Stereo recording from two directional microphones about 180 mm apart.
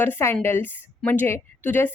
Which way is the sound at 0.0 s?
15° left (ahead or behind).